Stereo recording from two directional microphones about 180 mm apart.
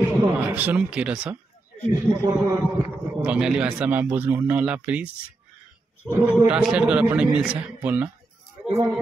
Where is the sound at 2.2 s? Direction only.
20° right (ahead or behind).